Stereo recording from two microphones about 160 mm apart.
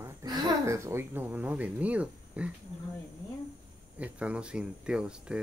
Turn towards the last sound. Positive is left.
turn(degrees=-5)  # may be behind; listen again after turning